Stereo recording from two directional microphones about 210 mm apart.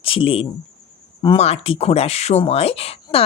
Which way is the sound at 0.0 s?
25° left (ahead or behind).